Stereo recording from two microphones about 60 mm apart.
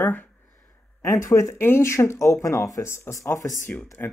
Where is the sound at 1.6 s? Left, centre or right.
Left.